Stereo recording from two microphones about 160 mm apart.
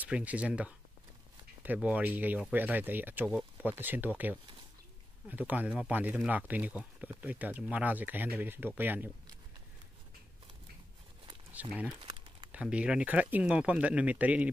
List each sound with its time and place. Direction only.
0.0 s speech: 10° right (ahead or behind)
11.5 s speech: 10° right (ahead or behind)
12.0 s crumpling: 35° right (ahead or behind)
12.5 s speech: 5° right (ahead or behind)